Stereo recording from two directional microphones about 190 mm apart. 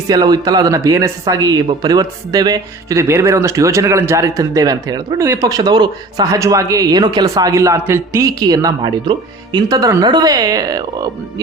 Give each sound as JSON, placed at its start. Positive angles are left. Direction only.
{"t": 0.1, "sound": "speech", "side_deg": -20}